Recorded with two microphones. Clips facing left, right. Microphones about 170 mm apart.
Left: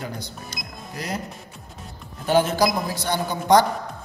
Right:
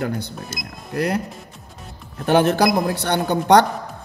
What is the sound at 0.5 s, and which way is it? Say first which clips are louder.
Speech: right 4 dB; 5° right (ahead or behind).